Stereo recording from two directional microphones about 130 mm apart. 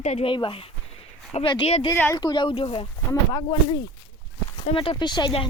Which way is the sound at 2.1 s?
35° left (ahead or behind).